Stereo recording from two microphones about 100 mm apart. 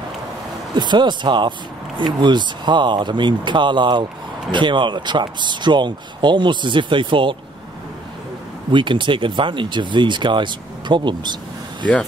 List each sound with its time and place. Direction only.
0.7 s speech: 50° right (ahead or behind)
8.7 s speech: 55° right (ahead or behind)